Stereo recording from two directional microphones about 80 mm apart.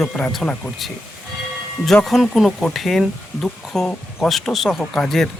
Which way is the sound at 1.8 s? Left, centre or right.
Centre.